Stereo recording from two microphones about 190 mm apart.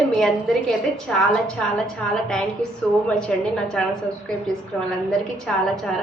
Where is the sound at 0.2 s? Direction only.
5° left (ahead or behind).